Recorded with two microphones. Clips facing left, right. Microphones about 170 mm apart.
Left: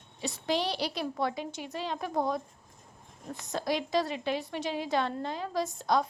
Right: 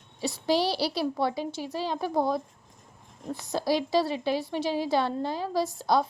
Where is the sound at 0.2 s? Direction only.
35° right (ahead or behind).